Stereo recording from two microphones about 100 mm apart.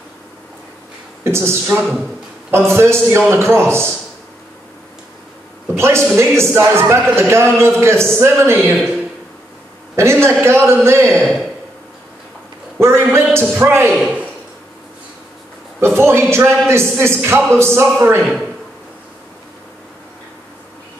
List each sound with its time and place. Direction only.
1.2 s a man's voice: 25° right (ahead or behind)
5.8 s a man's voice: 25° right (ahead or behind)
9.9 s a man's voice: 25° right (ahead or behind)
12.7 s a man's voice: 25° right (ahead or behind)
13.9 s speech: 10° right (ahead or behind)
15.8 s a man's voice: 25° right (ahead or behind)